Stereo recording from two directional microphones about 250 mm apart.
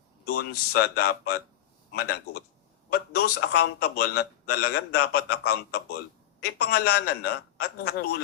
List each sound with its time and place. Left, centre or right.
0.7 s a man's voice: left